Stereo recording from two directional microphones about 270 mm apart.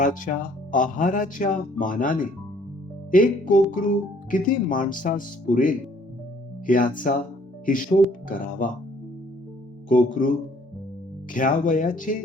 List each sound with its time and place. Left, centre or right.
0.0 s speech: left
9.9 s speech: left
11.3 s speech: left